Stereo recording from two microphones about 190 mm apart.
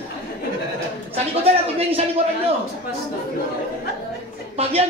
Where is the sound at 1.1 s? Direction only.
35° right (ahead or behind).